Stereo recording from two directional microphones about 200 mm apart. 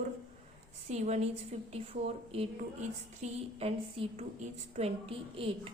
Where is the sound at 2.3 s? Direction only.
30° right (ahead or behind).